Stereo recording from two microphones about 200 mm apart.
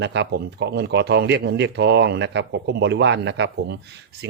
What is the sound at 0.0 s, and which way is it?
Speech, 60° right (ahead or behind).